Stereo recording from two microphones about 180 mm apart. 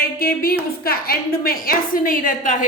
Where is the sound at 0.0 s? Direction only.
55° left (ahead or behind).